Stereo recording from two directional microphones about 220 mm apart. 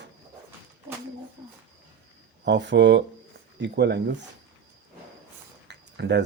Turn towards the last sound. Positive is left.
turn(degrees=-50)  # may be behind; listen again after turning